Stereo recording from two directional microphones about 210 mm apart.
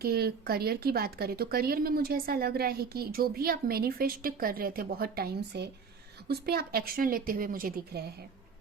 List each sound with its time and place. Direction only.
0.0 s speech: 45° right (ahead or behind)